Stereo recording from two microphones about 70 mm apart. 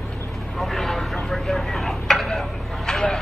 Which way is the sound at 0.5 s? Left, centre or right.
Centre.